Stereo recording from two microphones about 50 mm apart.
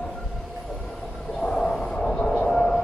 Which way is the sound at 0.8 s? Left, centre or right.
Centre.